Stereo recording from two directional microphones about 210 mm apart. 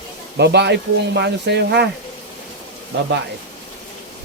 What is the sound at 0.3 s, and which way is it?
Speech, 55° right (ahead or behind).